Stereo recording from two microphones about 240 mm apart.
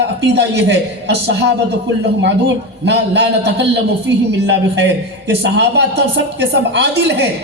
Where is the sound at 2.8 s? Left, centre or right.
Right.